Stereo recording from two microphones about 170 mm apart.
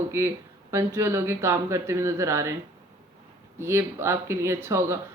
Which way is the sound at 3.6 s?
15° right (ahead or behind).